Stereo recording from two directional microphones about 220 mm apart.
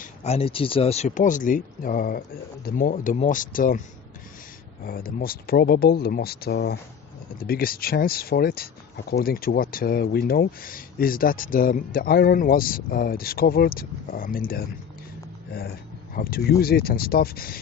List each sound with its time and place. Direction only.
0.0 s speech: 30° left (ahead or behind)
4.9 s speech: 40° left (ahead or behind)
16.1 s speech: 40° left (ahead or behind)